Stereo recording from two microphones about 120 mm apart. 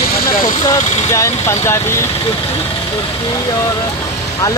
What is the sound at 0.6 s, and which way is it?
Speech, 30° left (ahead or behind).